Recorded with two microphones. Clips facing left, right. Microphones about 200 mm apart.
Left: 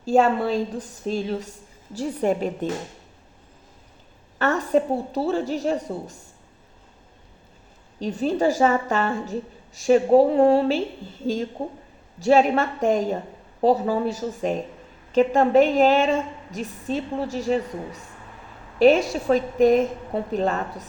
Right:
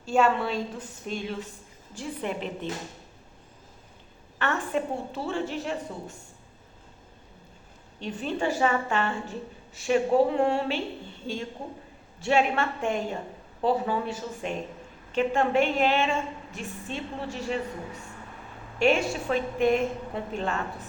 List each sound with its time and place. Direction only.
0.0 s a woman's voice: 35° left (ahead or behind)
4.4 s a woman's voice: 40° left (ahead or behind)
7.9 s a woman's voice: 40° left (ahead or behind)
18.8 s a woman's voice: 40° left (ahead or behind)